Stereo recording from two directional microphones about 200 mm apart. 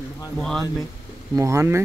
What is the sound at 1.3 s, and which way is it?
Speech, 15° right (ahead or behind).